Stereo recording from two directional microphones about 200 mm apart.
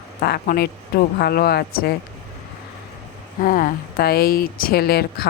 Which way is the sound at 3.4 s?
45° left (ahead or behind).